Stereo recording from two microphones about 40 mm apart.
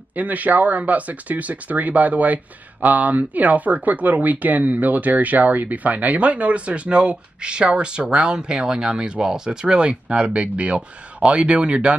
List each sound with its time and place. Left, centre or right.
0.1 s speech: right